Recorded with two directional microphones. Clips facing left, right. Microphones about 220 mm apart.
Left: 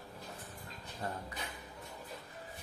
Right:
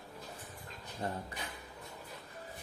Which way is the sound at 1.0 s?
25° right (ahead or behind).